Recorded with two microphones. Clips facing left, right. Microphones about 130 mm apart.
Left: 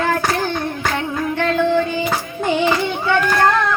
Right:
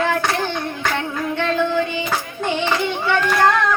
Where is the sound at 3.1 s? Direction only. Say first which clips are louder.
Left 2 dB; 5° left (ahead or behind).